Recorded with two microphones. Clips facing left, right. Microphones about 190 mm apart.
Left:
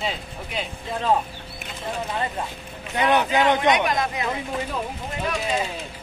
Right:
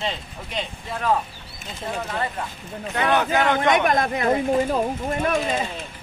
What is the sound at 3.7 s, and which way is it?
Speech, 50° right (ahead or behind).